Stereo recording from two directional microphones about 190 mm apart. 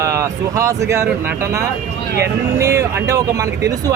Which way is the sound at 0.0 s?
15° right (ahead or behind).